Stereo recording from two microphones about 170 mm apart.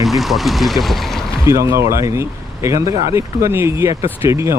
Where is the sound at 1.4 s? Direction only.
15° right (ahead or behind).